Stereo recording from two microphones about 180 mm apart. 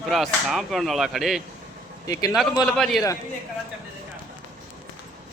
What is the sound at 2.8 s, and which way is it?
Speech, centre (ahead or behind).